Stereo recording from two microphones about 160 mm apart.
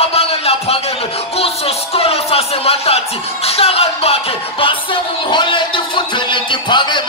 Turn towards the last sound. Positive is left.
turn(degrees=30)  # may be behind; listen again after turning